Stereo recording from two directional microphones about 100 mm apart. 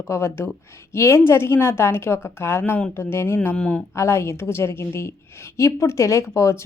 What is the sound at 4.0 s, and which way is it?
A woman's voice, 25° left (ahead or behind).